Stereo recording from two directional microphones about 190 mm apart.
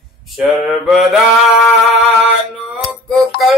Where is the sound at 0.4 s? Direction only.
Centre (ahead or behind).